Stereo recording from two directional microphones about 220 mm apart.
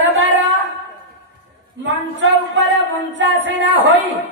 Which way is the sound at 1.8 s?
55° right (ahead or behind).